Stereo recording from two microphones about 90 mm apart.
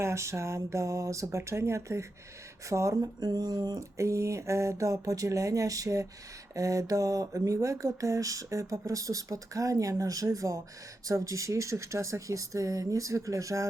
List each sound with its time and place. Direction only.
0.0 s speech: 30° right (ahead or behind); by 3.8 s 45° right (ahead or behind)
3.9 s speech: 35° right (ahead or behind)